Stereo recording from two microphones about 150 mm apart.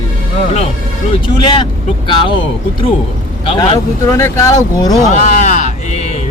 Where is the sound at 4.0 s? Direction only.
20° left (ahead or behind).